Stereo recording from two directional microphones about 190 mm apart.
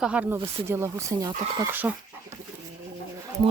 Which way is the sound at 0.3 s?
30° right (ahead or behind).